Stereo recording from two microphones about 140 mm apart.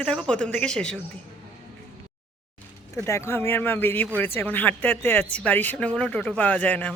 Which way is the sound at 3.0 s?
20° left (ahead or behind).